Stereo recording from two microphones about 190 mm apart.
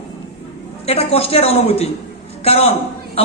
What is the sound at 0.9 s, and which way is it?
A man's voice, 30° left (ahead or behind).